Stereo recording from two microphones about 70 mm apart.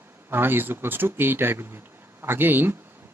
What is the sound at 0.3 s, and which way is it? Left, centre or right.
Speech, right.